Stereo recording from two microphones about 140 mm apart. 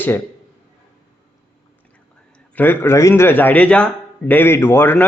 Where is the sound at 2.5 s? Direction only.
15° left (ahead or behind).